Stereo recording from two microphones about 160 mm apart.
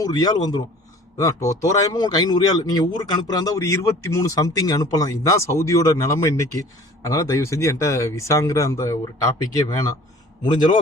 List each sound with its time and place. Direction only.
0.0 s speech: 25° left (ahead or behind)